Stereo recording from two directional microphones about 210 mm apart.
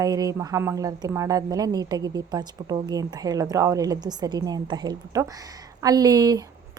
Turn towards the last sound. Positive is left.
turn(degrees=-15)  # may be behind; listen again after turning